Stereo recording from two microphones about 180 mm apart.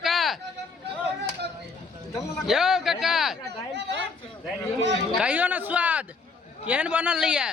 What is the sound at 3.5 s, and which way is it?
Speech, 70° right (ahead or behind).